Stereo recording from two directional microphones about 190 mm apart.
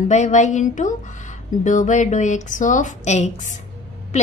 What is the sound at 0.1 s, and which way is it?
A woman's voice, 40° left (ahead or behind).